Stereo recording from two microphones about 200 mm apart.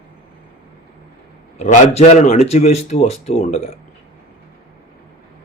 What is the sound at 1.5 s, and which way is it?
A man's voice, 35° left (ahead or behind).